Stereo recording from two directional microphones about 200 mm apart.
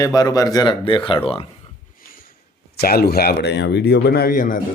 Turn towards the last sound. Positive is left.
turn(degrees=40)  # may be behind; listen again after turning